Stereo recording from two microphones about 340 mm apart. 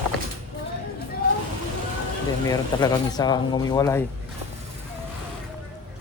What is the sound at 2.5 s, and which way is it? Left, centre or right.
Speech, centre.